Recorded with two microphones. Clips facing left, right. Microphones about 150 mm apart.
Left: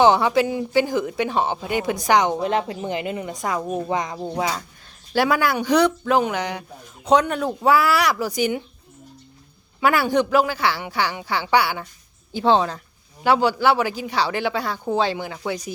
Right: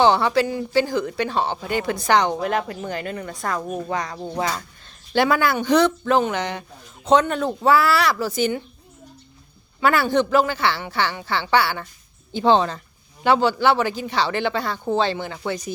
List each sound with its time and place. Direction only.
0.0 s speech: 15° left (ahead or behind)
4.4 s speech: 5° left (ahead or behind)
9.8 s speech: 10° left (ahead or behind)